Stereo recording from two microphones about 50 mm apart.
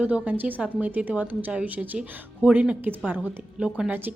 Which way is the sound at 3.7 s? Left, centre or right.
Centre.